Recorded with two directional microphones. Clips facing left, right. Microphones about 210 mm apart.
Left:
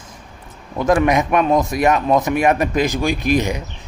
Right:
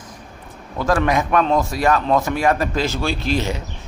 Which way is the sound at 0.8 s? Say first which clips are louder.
Left 3 dB; 20° left (ahead or behind).